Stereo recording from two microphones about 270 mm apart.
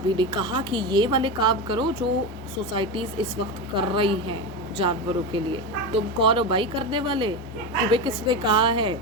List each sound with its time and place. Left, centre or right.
0.2 s a woman's voice: centre